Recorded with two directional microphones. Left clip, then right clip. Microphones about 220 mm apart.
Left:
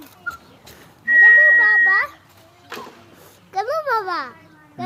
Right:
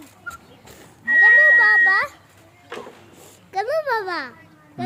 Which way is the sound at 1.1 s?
35° right (ahead or behind).